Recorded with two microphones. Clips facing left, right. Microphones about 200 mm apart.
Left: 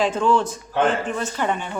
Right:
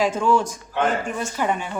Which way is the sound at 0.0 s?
10° right (ahead or behind).